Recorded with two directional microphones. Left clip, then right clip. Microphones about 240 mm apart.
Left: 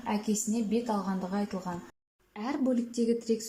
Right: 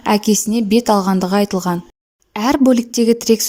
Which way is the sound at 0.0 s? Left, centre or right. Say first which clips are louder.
Right 17 dB; right.